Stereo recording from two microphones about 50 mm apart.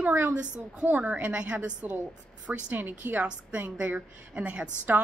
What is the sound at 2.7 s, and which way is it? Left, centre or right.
A woman's voice, right.